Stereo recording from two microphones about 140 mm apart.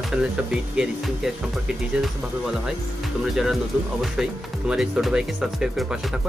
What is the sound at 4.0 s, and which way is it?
Speech, 5° right (ahead or behind).